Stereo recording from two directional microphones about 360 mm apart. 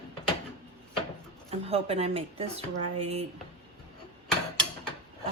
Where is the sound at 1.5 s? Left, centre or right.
Centre.